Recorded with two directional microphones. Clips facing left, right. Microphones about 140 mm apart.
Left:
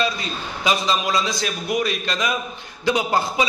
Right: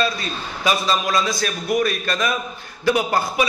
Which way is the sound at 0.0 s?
20° left (ahead or behind).